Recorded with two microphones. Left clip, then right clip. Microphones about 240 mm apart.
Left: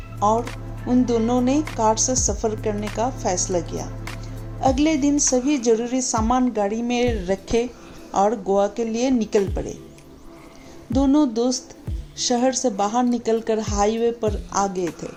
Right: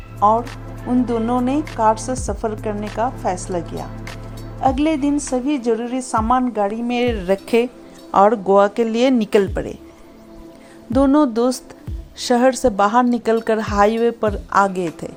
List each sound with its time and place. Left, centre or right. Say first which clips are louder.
0.9 s speech: right 1 dB; right
10.9 s speech: right 4 dB; right